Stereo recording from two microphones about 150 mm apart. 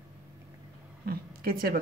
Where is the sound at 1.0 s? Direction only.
80° right.